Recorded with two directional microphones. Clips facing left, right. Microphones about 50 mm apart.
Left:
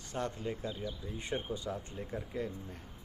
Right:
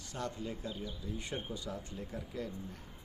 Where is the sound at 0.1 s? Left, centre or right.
Left.